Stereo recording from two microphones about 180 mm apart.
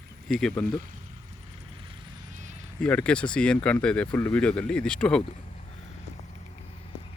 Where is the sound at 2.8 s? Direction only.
5° left (ahead or behind).